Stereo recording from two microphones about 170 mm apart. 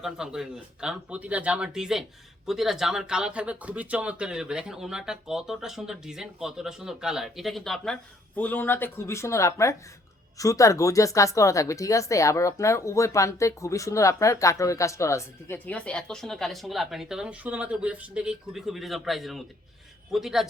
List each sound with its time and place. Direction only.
0.0 s speech: 5° right (ahead or behind)